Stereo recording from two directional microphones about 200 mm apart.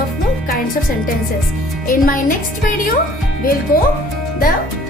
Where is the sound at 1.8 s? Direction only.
45° left (ahead or behind).